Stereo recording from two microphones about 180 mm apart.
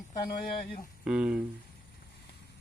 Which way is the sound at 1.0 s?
5° right (ahead or behind).